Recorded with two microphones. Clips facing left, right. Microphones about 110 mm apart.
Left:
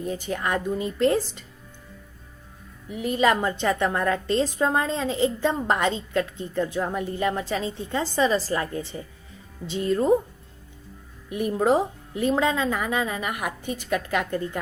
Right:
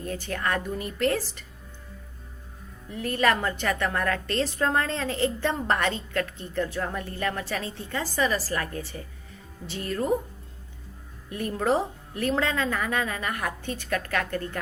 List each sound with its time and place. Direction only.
0.0 s a woman's voice: 15° left (ahead or behind)
2.9 s a woman's voice: 15° left (ahead or behind)
11.3 s a woman's voice: 15° left (ahead or behind)